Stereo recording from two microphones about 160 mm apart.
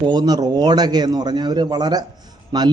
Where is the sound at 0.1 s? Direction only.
25° right (ahead or behind).